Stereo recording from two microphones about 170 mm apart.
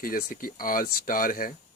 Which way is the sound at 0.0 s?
55° left (ahead or behind).